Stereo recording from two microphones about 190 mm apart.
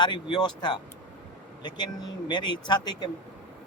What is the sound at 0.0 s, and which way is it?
Speech, 25° left (ahead or behind).